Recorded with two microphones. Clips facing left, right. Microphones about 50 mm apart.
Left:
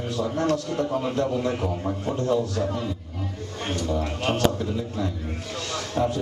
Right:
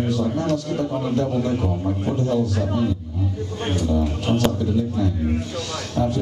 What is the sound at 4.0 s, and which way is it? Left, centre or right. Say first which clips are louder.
Speech: right 3 dB; left.